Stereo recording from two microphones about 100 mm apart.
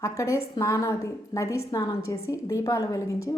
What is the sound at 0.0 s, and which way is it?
A woman's voice, 30° left (ahead or behind).